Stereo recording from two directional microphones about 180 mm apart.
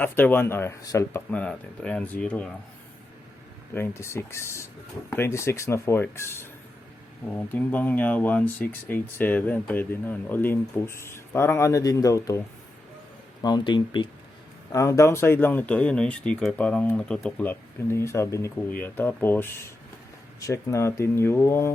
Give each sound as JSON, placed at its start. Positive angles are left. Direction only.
{"t": 0.0, "sound": "speech", "side_deg": 10}
{"t": 3.8, "sound": "speech", "side_deg": 15}
{"t": 7.5, "sound": "speech", "side_deg": 10}
{"t": 13.4, "sound": "speech", "side_deg": 25}